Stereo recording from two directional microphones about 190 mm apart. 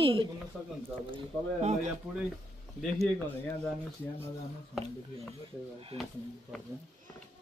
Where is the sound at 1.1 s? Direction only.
35° right (ahead or behind).